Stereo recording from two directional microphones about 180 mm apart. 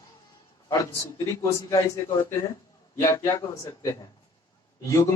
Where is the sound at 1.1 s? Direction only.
20° left (ahead or behind).